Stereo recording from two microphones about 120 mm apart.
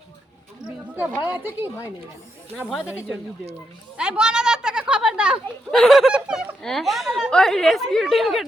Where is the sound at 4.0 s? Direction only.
5° right (ahead or behind).